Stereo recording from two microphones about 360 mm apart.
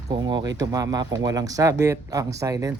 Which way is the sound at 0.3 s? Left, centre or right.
Centre.